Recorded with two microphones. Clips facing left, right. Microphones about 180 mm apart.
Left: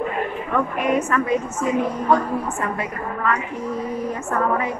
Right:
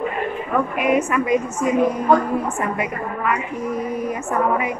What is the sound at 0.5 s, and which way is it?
A woman's voice, 10° right (ahead or behind).